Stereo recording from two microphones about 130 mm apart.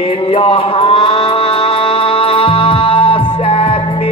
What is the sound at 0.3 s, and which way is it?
Music, 40° left (ahead or behind).